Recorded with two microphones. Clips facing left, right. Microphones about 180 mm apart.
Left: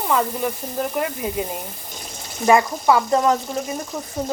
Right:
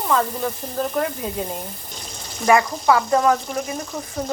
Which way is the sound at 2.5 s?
20° left (ahead or behind).